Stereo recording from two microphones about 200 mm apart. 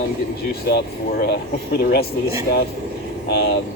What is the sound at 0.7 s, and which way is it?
Speech, 55° left (ahead or behind).